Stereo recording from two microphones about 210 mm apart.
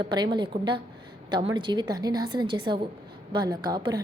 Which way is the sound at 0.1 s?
20° right (ahead or behind).